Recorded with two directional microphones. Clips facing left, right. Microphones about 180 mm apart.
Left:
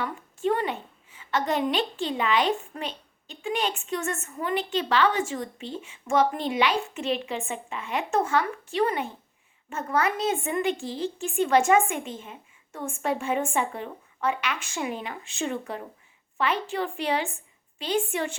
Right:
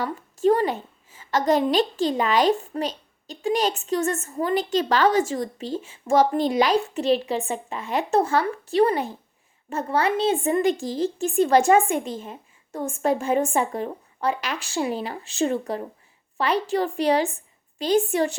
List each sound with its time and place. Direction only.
0.0 s a woman's voice: 40° right (ahead or behind)